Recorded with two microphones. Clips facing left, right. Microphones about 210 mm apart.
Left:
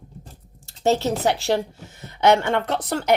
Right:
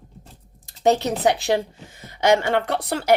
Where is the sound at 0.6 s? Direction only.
15° right (ahead or behind).